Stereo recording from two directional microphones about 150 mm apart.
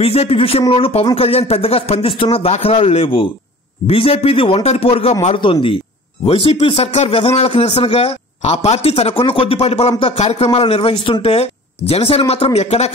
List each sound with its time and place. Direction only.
0.0 s a man's voice: 40° left (ahead or behind)